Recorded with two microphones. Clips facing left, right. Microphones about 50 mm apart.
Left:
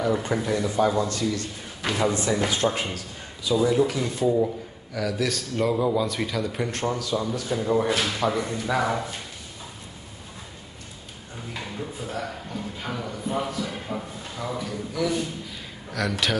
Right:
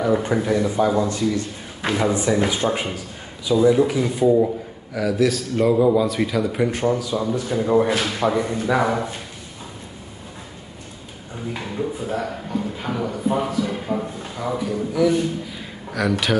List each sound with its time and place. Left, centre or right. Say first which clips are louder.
0.3 s a man's voice: right 5 dB; centre
11.5 s a man's voice: right 7 dB; centre